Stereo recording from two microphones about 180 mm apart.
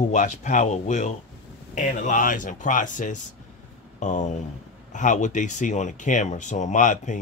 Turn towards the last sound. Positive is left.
turn(degrees=45)  # may be behind; listen again after turning